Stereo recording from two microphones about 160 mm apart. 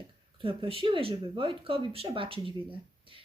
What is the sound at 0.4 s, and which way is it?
Speech, 35° right (ahead or behind).